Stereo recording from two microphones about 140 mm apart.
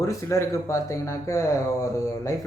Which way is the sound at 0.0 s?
20° left (ahead or behind).